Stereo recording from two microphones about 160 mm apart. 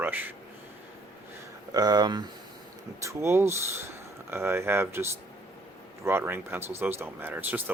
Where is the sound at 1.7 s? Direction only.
25° right (ahead or behind).